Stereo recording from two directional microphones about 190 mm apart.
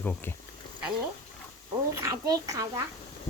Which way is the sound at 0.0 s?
10° left (ahead or behind).